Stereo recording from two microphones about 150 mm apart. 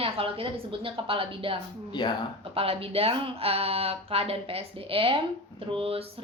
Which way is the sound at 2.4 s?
40° right (ahead or behind).